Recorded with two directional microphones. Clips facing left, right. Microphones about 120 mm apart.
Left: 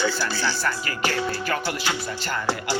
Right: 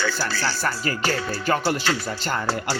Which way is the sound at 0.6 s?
35° right (ahead or behind).